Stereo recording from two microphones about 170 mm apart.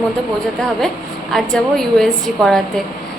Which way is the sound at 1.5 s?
Centre (ahead or behind).